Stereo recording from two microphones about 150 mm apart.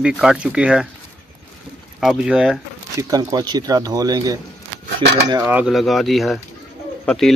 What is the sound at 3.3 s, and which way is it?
Speech, 25° right (ahead or behind).